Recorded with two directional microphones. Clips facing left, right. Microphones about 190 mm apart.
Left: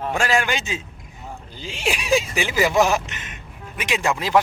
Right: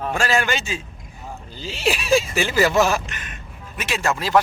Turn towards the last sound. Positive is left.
turn(degrees=15)  # may be behind; listen again after turning